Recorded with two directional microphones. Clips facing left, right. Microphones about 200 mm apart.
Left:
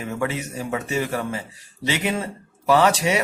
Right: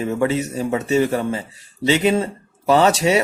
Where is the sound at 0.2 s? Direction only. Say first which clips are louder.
Right 5 dB; 30° right (ahead or behind).